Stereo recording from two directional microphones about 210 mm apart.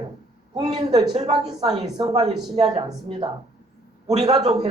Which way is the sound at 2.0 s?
30° right (ahead or behind).